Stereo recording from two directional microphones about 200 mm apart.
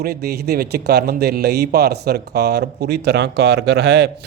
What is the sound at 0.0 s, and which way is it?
A man's voice, 50° right (ahead or behind).